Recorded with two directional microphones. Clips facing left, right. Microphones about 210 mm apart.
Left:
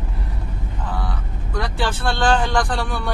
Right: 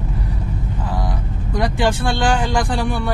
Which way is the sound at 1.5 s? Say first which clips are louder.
Right 5 dB; 15° right (ahead or behind).